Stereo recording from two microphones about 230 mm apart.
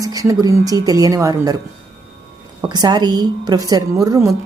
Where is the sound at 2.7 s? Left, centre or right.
Centre.